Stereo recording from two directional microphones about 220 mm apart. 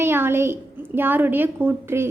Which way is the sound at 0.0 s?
10° right (ahead or behind).